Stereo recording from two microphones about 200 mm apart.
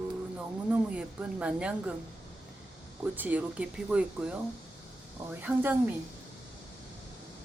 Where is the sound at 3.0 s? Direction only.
10° right (ahead or behind).